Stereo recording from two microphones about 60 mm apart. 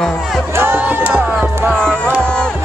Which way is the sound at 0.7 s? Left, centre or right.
Right.